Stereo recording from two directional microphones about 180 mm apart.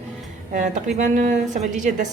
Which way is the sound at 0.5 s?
45° right (ahead or behind).